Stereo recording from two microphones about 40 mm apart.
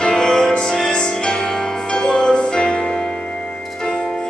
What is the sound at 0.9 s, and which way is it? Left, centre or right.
Music, left.